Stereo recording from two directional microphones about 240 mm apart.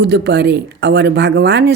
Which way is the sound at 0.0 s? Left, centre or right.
Right.